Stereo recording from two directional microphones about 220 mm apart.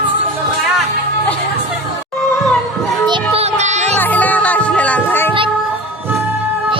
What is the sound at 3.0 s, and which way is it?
Music, 25° right (ahead or behind).